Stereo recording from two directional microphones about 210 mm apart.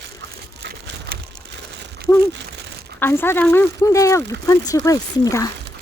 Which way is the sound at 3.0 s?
10° left (ahead or behind).